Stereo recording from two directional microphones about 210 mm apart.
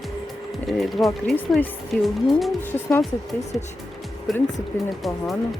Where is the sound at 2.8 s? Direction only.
10° left (ahead or behind).